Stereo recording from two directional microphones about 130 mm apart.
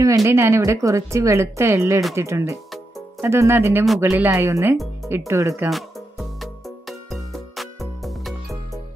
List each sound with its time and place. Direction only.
0.0 s speech: 25° right (ahead or behind)
5.7 s music: centre (ahead or behind)